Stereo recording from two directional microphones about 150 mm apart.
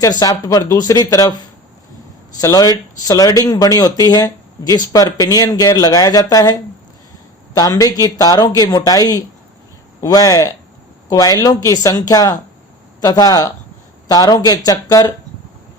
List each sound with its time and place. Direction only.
0.0 s speech: 25° left (ahead or behind)
2.4 s speech: 25° left (ahead or behind)